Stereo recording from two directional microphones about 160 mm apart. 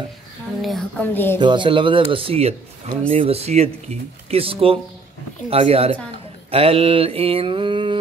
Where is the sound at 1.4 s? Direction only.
30° right (ahead or behind).